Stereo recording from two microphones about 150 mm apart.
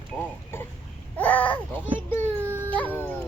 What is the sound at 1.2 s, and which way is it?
Babbling, 10° left (ahead or behind).